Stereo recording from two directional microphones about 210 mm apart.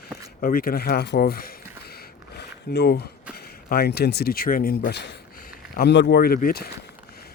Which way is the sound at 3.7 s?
50° left (ahead or behind).